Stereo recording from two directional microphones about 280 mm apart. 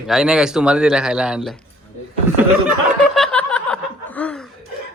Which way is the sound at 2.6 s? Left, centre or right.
Centre.